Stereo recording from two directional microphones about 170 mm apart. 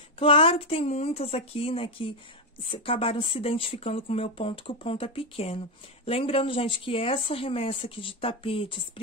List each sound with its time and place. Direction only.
0.2 s speech: 30° left (ahead or behind)